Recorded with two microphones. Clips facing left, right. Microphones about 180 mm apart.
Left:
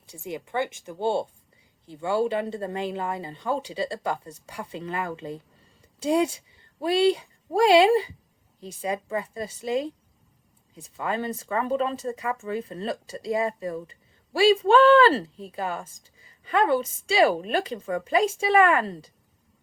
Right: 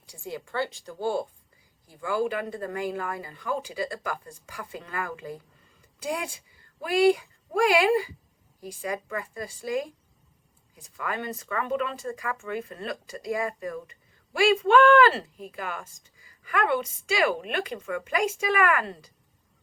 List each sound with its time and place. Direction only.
0.1 s speech: 20° left (ahead or behind)